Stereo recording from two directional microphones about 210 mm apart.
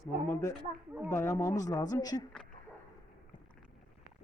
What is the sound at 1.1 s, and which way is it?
Speech, 15° left (ahead or behind).